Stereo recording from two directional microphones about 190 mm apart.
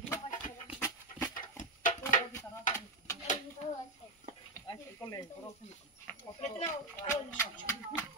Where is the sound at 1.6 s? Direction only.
40° left (ahead or behind).